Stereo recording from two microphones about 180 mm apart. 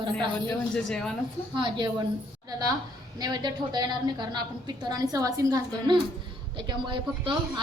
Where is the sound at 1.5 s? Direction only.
25° right (ahead or behind).